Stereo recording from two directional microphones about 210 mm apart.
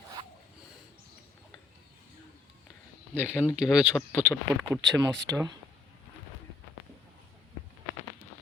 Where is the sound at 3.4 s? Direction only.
5° right (ahead or behind).